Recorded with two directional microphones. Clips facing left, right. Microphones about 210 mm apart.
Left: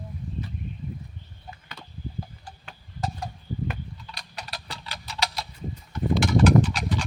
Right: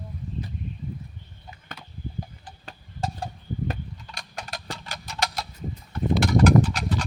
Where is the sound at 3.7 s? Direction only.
45° right (ahead or behind).